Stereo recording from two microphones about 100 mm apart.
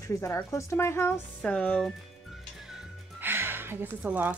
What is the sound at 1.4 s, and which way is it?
Speech, 10° left (ahead or behind).